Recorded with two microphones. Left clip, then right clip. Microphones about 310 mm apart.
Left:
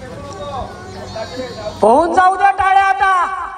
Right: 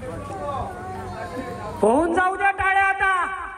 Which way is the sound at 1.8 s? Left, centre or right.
Centre.